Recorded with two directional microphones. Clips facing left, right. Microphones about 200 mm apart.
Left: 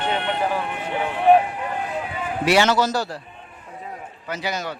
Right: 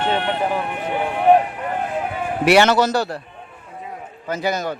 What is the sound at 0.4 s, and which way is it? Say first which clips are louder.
Vehicle: right 2 dB; 10° right (ahead or behind).